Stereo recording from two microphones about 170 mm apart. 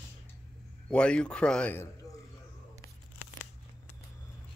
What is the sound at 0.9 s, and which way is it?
Speech, 5° left (ahead or behind).